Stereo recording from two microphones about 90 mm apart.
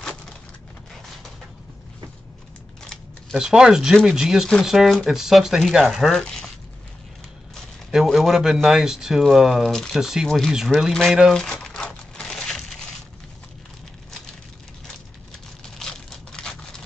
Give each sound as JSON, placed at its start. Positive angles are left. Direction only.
{"t": 2.8, "sound": "camera", "side_deg": 5}
{"t": 3.3, "sound": "speech", "side_deg": -5}
{"t": 7.5, "sound": "speech", "side_deg": -5}
{"t": 11.3, "sound": "crumpling", "side_deg": 5}
{"t": 15.6, "sound": "crushing", "side_deg": 5}